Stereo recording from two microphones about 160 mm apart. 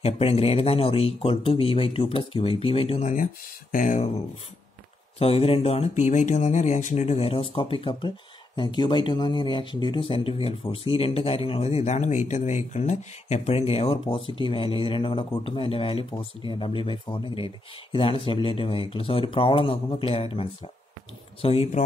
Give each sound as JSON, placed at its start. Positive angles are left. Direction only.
{"t": 0.0, "sound": "speech", "side_deg": 40}
{"t": 3.7, "sound": "speech", "side_deg": 50}
{"t": 5.2, "sound": "speech", "side_deg": 35}